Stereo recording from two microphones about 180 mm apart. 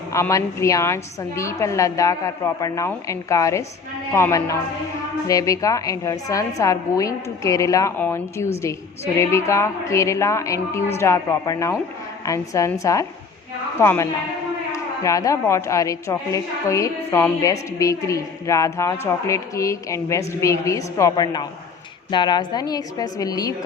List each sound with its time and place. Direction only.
0.1 s a woman's voice: 15° left (ahead or behind)